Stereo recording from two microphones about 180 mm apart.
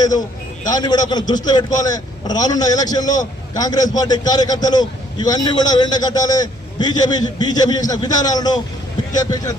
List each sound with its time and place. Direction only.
0.0 s a man's voice: 20° left (ahead or behind)